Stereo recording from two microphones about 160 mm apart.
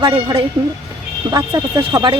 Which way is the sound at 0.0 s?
25° right (ahead or behind).